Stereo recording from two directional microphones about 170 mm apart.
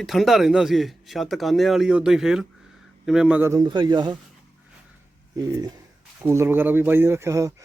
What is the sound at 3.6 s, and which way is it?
Speech, 25° right (ahead or behind).